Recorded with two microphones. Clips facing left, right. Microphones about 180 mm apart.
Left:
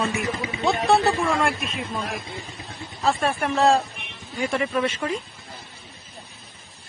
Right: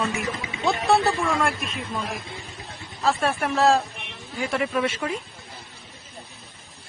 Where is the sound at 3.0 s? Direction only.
Centre (ahead or behind).